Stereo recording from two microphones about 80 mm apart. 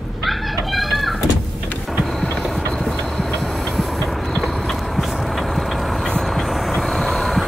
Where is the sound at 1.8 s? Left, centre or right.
Centre.